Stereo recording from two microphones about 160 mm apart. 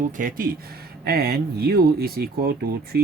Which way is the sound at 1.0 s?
75° right (ahead or behind).